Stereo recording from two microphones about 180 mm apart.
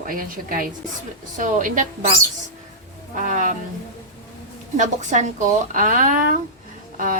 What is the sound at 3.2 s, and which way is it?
Speech, 45° right (ahead or behind).